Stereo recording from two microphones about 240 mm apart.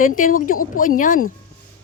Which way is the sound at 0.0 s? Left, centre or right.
Left.